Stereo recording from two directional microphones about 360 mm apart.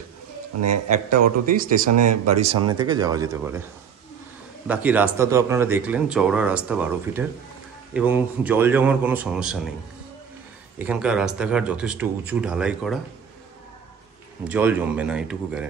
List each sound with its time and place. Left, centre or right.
1.4 s speech: right
1.9 s speech: right
2.3 s speech: centre
4.6 s speech: centre
10.8 s speech: centre
14.5 s speech: centre